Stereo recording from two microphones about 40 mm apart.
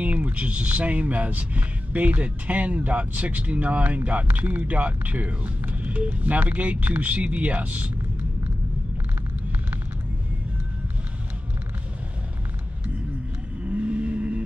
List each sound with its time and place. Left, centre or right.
0.0 s speech: right
13.7 s vehicle: right